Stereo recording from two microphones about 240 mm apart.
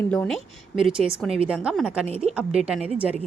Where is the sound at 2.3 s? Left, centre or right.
Centre.